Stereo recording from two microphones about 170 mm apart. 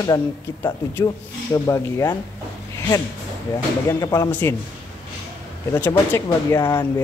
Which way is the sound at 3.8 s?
20° left (ahead or behind).